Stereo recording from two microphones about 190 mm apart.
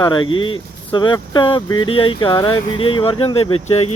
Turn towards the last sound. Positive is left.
turn(degrees=30)  # may be behind; listen again after turning